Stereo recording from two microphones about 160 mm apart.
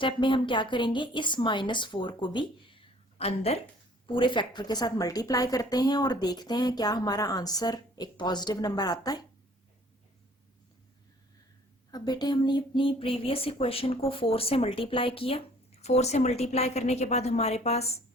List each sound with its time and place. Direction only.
0.0 s a woman's voice: 30° left (ahead or behind)
11.9 s speech: 25° left (ahead or behind); by 18.0 s 40° left (ahead or behind)